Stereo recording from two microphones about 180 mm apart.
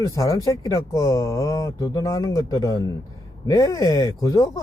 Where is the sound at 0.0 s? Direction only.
20° left (ahead or behind).